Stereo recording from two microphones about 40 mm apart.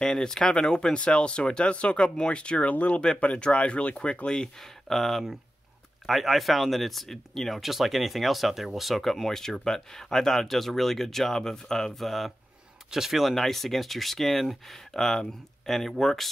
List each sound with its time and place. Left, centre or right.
0.0 s speech: centre
4.6 s speech: centre
12.0 s speech: centre
13.3 s speech: centre